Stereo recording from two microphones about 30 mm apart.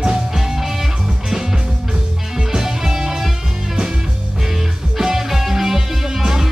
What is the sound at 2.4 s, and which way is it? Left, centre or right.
Music, centre.